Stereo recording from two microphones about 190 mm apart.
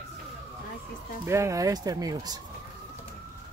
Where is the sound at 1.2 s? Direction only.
15° right (ahead or behind).